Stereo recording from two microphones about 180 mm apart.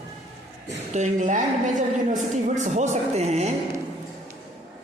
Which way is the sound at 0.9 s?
45° right (ahead or behind).